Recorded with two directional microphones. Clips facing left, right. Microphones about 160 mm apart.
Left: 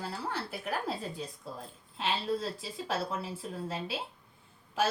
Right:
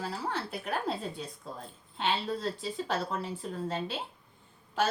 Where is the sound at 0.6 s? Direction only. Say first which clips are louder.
Right 1 dB; 5° left (ahead or behind).